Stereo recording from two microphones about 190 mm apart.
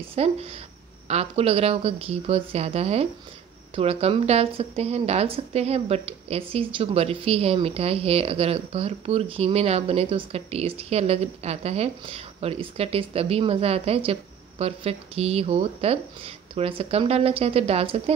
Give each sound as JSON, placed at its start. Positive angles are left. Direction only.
{"t": 0.1, "sound": "a woman's voice", "side_deg": -30}